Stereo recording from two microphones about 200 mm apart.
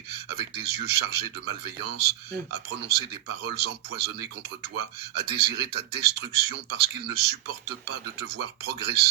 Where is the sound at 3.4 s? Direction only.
50° right (ahead or behind).